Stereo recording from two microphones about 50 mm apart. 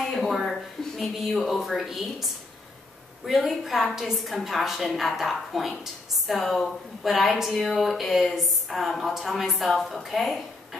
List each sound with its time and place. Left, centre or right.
0.1 s speech: centre
3.3 s a woman's voice: centre